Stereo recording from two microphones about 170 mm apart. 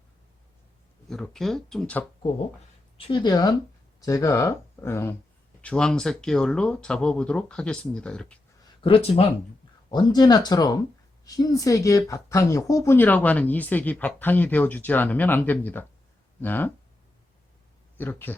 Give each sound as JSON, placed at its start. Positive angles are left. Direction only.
{"t": 1.1, "sound": "speech", "side_deg": 0}
{"t": 3.1, "sound": "speech", "side_deg": 25}
{"t": 8.6, "sound": "speech", "side_deg": 30}
{"t": 9.9, "sound": "speech", "side_deg": 25}
{"t": 17.9, "sound": "speech", "side_deg": 10}